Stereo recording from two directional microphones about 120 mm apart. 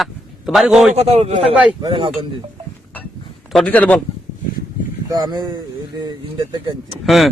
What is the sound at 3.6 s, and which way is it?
Speech, 15° left (ahead or behind).